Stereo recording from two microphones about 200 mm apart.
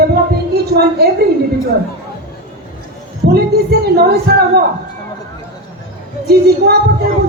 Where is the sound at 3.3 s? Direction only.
55° right (ahead or behind).